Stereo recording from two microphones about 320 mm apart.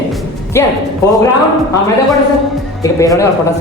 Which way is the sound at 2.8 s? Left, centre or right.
Centre.